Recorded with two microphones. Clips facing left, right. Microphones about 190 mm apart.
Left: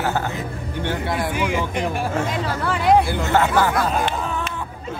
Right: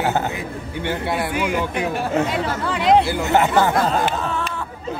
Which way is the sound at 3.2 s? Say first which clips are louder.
Right 1 dB; 20° right (ahead or behind).